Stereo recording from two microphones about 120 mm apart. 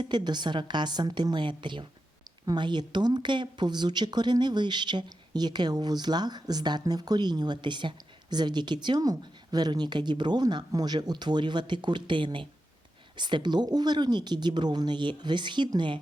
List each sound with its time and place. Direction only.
0.0 s speech: 40° right (ahead or behind)